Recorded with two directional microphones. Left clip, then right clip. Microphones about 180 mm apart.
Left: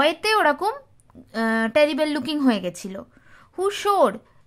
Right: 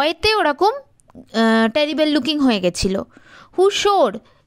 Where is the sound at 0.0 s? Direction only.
35° right (ahead or behind).